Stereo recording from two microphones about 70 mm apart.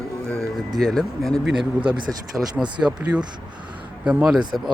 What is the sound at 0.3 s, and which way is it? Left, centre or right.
Speech, centre.